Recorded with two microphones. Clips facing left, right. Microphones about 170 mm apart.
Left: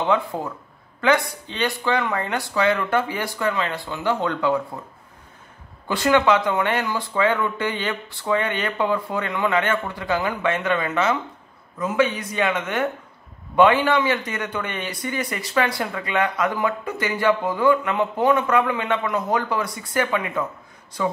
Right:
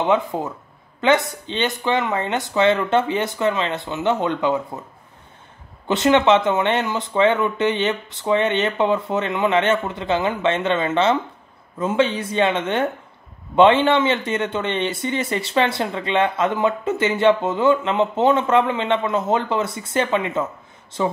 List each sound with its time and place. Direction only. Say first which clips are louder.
0.0 s speech: right 2 dB; 20° right (ahead or behind)
5.9 s speech: right 3 dB; 20° right (ahead or behind)